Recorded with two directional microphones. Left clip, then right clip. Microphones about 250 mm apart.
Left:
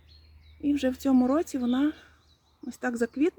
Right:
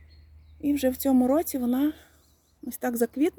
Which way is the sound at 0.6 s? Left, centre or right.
Centre.